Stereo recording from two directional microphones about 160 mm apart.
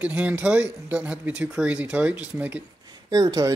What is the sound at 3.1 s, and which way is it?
Speech, 20° right (ahead or behind).